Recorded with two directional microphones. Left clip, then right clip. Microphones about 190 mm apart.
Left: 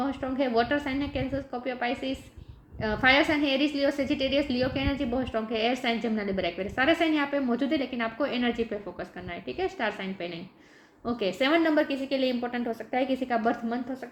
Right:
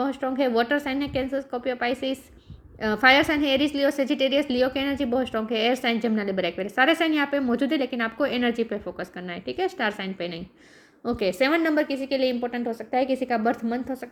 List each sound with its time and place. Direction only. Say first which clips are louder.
0.0 s a woman's voice: right 4 dB; 40° right (ahead or behind)